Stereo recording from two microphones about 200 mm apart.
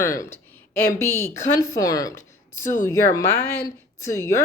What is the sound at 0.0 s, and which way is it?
A woman's voice, 15° left (ahead or behind).